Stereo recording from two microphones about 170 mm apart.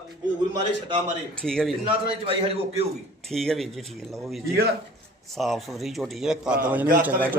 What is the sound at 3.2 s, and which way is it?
A man's voice, centre (ahead or behind).